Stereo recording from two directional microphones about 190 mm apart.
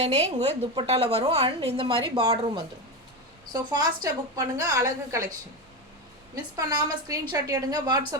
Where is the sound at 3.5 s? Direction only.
20° right (ahead or behind).